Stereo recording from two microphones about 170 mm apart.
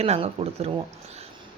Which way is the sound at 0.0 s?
35° right (ahead or behind).